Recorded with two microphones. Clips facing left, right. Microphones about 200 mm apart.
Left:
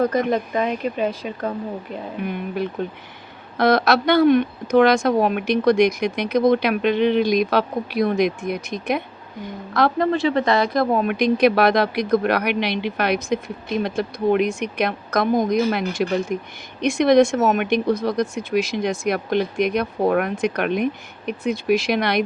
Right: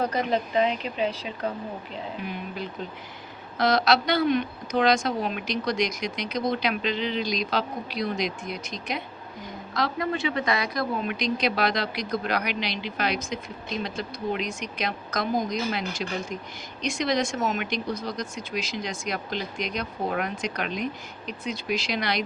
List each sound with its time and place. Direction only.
0.0 s a woman's voice: 50° left (ahead or behind)